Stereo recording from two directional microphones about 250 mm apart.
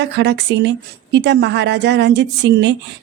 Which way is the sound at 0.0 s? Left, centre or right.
Right.